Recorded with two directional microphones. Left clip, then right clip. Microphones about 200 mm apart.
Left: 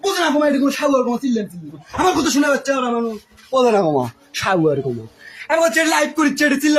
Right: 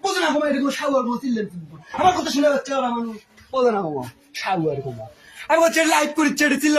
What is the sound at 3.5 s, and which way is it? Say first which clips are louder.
Speech: left 5 dB; 45° left (ahead or behind).